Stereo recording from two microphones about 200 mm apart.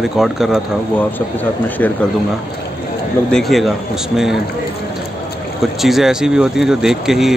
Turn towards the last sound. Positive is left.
turn(degrees=0)  # may be behind; listen again after turning